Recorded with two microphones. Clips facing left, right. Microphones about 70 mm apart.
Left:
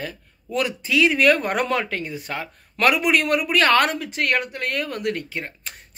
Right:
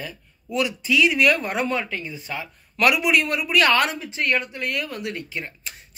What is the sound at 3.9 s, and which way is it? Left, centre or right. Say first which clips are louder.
Speech: left 1 dB; left.